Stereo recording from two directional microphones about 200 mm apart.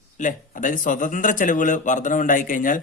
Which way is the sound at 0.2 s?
40° left (ahead or behind).